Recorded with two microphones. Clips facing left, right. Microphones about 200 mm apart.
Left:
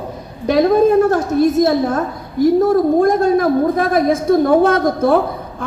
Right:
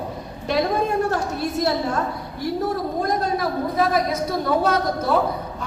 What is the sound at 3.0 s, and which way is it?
A woman's voice, 50° left (ahead or behind).